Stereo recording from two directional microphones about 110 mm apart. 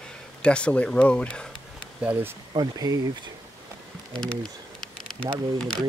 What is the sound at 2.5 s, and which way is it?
Speech, 35° right (ahead or behind).